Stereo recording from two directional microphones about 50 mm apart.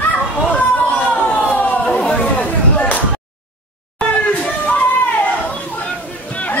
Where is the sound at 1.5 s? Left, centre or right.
Left.